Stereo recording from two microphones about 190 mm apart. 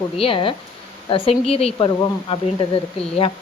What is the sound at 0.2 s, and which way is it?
A woman's voice, 30° left (ahead or behind).